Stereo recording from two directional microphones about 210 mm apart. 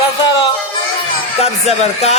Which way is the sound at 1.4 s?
30° left (ahead or behind).